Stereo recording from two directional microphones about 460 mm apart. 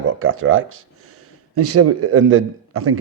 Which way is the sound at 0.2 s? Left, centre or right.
Right.